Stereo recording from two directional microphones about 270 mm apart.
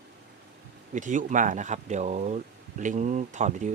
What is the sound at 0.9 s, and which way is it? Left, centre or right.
Speech, right.